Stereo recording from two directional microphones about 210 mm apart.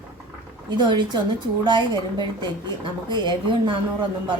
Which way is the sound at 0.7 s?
20° right (ahead or behind).